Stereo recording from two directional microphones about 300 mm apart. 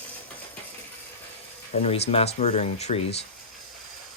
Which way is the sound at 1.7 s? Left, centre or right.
Left.